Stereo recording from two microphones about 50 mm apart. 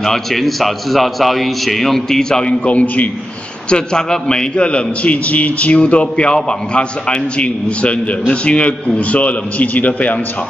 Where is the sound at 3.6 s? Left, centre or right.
Centre.